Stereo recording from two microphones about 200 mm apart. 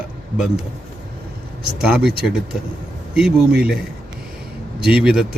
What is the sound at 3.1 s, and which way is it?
Speech, centre (ahead or behind).